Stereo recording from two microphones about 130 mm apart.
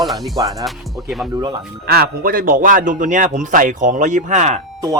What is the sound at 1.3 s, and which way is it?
Speech, 30° right (ahead or behind).